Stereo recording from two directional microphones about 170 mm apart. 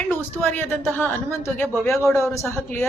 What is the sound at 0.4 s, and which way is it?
Speech, 10° left (ahead or behind).